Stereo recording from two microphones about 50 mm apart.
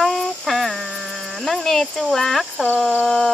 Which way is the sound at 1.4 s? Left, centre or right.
Centre.